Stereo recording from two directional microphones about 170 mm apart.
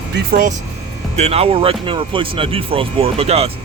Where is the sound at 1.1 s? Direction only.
40° right (ahead or behind).